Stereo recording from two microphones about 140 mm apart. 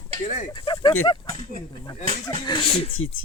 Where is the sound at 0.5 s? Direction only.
35° left (ahead or behind).